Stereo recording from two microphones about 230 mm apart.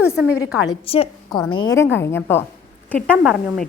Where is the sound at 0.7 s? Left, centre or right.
Left.